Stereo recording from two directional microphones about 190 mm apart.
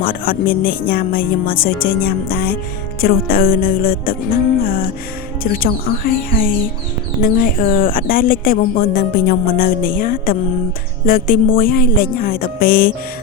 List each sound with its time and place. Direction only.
0.0 s a woman's voice: 50° left (ahead or behind)
5.4 s a woman's voice: 50° left (ahead or behind)